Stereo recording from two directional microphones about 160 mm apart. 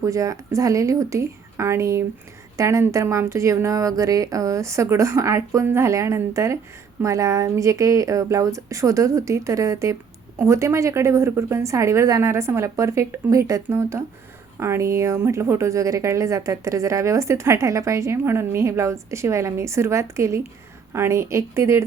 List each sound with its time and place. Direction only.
0.0 s a woman's voice: 20° right (ahead or behind)